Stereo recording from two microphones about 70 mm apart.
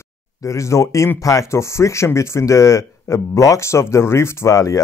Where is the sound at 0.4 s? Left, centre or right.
Left.